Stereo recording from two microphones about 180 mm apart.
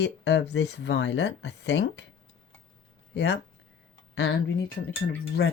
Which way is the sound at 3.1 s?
70° left (ahead or behind).